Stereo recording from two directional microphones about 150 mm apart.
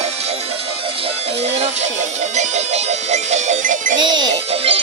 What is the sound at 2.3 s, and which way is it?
Music, 45° right (ahead or behind).